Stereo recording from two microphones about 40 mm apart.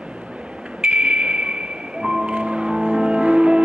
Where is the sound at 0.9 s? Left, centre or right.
Right.